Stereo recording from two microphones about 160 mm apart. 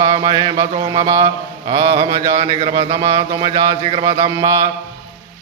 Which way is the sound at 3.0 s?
25° right (ahead or behind).